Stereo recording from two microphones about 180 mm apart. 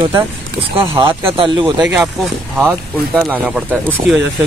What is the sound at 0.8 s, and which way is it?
Speech, 30° right (ahead or behind).